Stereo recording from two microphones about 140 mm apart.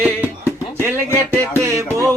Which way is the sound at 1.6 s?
20° right (ahead or behind).